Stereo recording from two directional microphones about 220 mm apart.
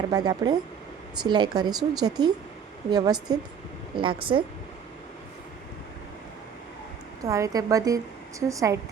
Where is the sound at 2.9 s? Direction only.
20° right (ahead or behind).